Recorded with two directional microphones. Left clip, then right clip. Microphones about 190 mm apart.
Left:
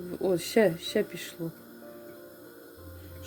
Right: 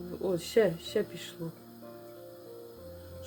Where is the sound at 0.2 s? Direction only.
25° left (ahead or behind).